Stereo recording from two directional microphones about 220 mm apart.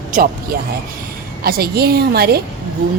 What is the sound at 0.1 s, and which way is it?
A woman's voice, 40° right (ahead or behind).